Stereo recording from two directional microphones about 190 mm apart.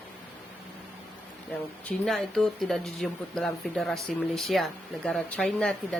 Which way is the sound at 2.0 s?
Centre (ahead or behind).